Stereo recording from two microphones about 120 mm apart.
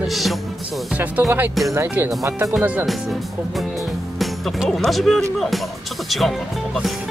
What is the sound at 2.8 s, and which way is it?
Speech, centre (ahead or behind).